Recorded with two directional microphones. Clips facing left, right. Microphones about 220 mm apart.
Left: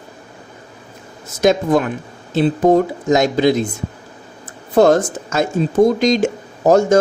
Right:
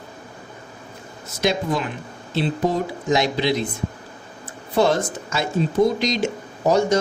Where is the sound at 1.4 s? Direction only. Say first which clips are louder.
Left 8 dB; 50° left (ahead or behind).